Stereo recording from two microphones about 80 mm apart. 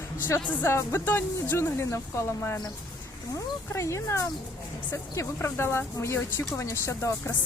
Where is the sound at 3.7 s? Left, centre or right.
Left.